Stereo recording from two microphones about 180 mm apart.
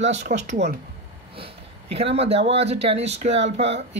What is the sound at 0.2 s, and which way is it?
Speech, 40° right (ahead or behind).